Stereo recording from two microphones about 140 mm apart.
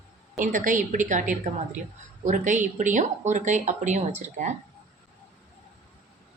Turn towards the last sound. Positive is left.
turn(degrees=-60)  # may be behind; listen again after turning